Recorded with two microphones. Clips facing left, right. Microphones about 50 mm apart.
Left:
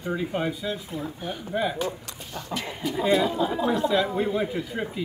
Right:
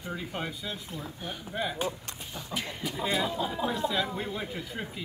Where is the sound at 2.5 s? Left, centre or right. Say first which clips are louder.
Left 3 dB; left.